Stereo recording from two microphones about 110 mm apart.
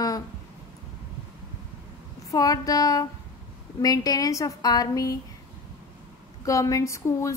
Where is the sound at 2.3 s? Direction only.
35° left (ahead or behind).